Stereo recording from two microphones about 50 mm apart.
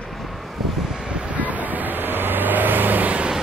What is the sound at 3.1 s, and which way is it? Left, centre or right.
Vehicle, right.